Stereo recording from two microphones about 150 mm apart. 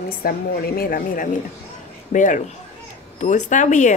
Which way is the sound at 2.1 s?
60° left (ahead or behind).